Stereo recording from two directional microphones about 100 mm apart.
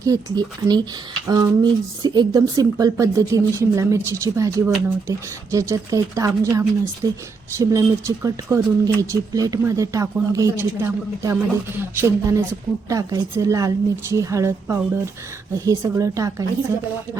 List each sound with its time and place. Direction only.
0.0 s speech: 35° right (ahead or behind)